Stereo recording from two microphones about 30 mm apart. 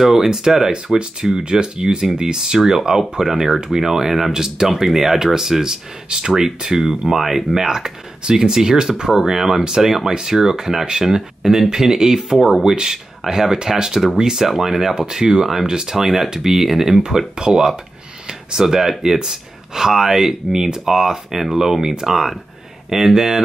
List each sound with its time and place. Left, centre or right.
0.0 s speech: centre
1.4 s speech: right
9.1 s speech: centre
15.0 s speech: right
16.3 s speech: centre
17.5 s speech: right
18.2 s a sound: right
18.7 s speech: centre